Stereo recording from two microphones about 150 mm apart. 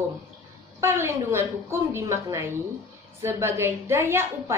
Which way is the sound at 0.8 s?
15° right (ahead or behind).